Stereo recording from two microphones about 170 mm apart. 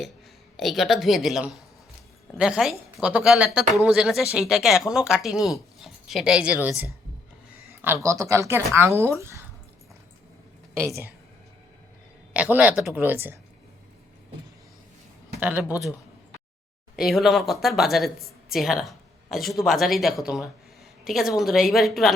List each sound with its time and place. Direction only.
0.5 s speech: centre (ahead or behind)
8.0 s speech: 20° right (ahead or behind)
10.8 s speech: 15° right (ahead or behind)
12.3 s speech: 10° right (ahead or behind)
15.4 s speech: 10° right (ahead or behind)
15.6 s a man's voice: 20° left (ahead or behind)
17.0 s speech: centre (ahead or behind)